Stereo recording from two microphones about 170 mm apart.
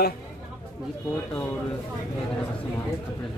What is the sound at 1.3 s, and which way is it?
Speech, 10° left (ahead or behind).